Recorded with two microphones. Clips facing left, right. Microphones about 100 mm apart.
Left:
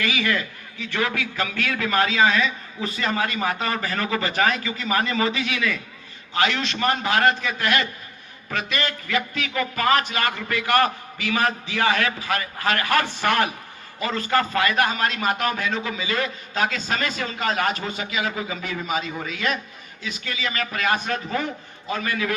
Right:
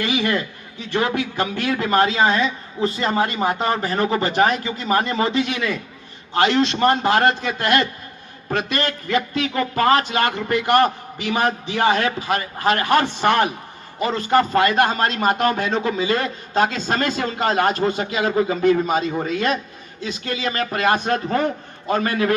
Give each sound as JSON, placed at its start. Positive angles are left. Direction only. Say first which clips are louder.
{"t": 0.0, "sound": "a man's voice", "louder": "right 3 dB", "side_deg": -25}
{"t": 21.1, "sound": "a man's voice", "louder": "right 6 dB", "side_deg": -45}